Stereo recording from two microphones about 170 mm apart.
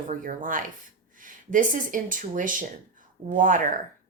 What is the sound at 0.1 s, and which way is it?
Speech, 50° right (ahead or behind).